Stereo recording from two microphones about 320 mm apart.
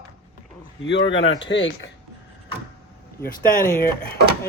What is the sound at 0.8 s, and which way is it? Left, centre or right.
Speech, left.